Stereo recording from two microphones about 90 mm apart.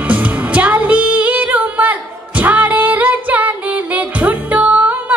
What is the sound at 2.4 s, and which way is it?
Female singing, 15° right (ahead or behind).